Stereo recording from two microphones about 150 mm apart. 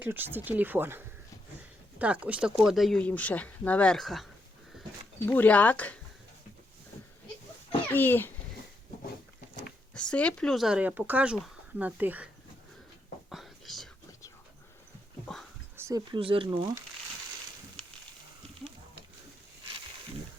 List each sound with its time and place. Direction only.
0.0 s speech: 15° right (ahead or behind)
3.0 s speech: 10° left (ahead or behind)
5.3 s speech: 10° left (ahead or behind)
7.9 s speech: 15° left (ahead or behind)
9.9 s speech: 5° left (ahead or behind); by 12.3 s 10° right (ahead or behind)
13.3 s whispering: centre (ahead or behind)
15.7 s a sound: 20° right (ahead or behind)
16.2 s speech: 35° right (ahead or behind)